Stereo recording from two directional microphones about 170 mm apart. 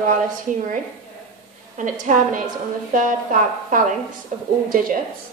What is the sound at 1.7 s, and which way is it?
Speech, 50° right (ahead or behind).